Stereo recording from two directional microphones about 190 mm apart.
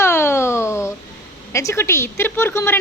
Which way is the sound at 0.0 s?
10° left (ahead or behind).